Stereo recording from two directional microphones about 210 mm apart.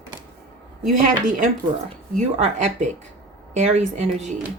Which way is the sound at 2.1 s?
35° right (ahead or behind).